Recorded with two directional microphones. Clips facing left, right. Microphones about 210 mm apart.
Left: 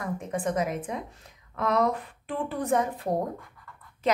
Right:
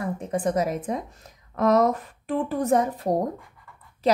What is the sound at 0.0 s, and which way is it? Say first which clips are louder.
A woman's voice: right 4 dB; 35° right (ahead or behind).